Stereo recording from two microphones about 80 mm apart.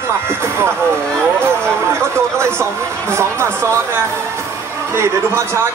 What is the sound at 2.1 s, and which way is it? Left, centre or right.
Speech, right.